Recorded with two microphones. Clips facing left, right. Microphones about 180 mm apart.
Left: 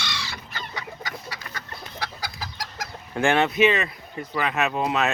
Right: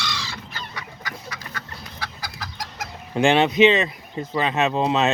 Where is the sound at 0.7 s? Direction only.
25° left (ahead or behind).